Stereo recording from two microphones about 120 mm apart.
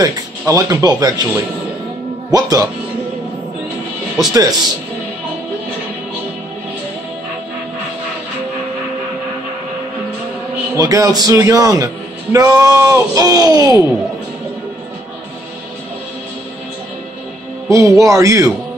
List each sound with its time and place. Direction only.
0.0 s speech: 25° right (ahead or behind)
4.3 s a man's voice: 30° right (ahead or behind)
10.7 s a man's voice: 30° right (ahead or behind)
17.6 s a man's voice: 25° right (ahead or behind)